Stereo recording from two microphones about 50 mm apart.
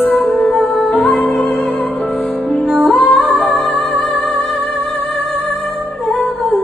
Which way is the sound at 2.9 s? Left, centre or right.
Left.